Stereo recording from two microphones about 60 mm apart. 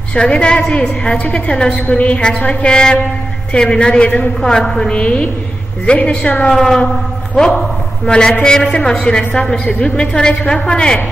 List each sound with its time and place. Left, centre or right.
0.1 s a woman's voice: centre
4.4 s a woman's voice: centre
6.5 s a sound: centre
7.3 s a man's voice: centre